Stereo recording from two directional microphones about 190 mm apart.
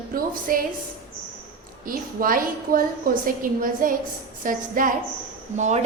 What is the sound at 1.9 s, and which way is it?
A woman's voice, 45° right (ahead or behind).